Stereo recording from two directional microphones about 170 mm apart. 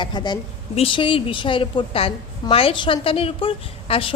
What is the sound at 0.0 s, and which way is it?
A woman's voice, 25° left (ahead or behind).